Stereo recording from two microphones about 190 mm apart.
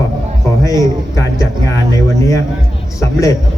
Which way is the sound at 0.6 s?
15° left (ahead or behind).